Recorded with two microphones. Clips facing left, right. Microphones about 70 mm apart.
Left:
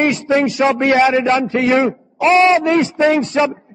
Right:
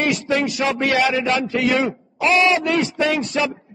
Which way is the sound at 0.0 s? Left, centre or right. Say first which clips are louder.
Left 5 dB; left.